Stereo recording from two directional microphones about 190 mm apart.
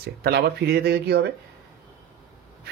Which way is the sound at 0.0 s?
60° right (ahead or behind).